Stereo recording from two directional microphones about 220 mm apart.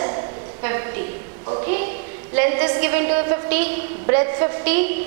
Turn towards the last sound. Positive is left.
turn(degrees=-15)  # may be behind; listen again after turning